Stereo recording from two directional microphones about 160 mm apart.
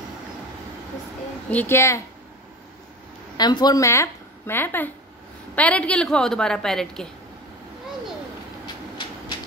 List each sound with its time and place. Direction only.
1.5 s speech: 15° left (ahead or behind)
3.3 s a woman's voice: 25° left (ahead or behind); by 7.1 s 5° left (ahead or behind)